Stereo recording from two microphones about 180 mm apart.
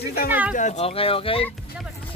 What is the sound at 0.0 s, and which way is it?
Speech, 60° left (ahead or behind).